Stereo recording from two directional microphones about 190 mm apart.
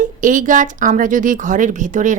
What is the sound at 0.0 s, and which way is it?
Speech, 45° right (ahead or behind).